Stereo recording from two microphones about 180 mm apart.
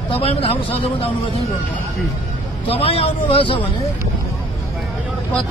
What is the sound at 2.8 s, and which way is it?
Speech, 35° left (ahead or behind).